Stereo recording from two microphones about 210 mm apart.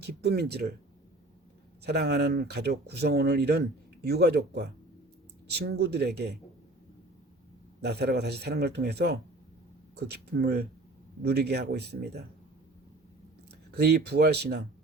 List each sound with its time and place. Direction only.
0.0 s speech: 50° right (ahead or behind)
1.8 s speech: 50° right (ahead or behind)
7.8 s speech: 50° right (ahead or behind)
13.7 s speech: 50° right (ahead or behind)